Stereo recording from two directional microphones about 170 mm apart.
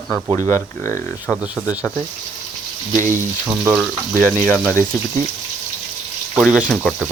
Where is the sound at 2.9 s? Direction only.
50° right (ahead or behind).